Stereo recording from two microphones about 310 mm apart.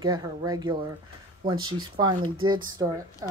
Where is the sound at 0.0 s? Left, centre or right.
Centre.